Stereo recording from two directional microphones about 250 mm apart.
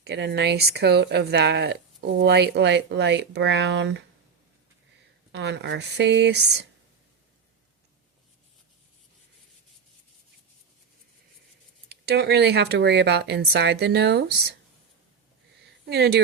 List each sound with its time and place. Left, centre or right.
0.0 s speech: right
5.3 s speech: right
11.9 s speech: right
15.9 s speech: right